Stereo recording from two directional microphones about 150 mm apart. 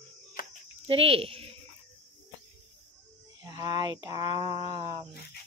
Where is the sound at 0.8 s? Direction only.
40° right (ahead or behind).